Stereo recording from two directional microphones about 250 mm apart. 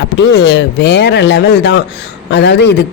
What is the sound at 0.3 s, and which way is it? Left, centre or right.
A man's voice, left.